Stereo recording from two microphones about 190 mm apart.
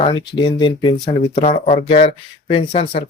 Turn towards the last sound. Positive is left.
turn(degrees=30)  # may be behind; listen again after turning